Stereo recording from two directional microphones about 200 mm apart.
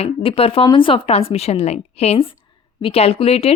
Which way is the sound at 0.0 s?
30° left (ahead or behind).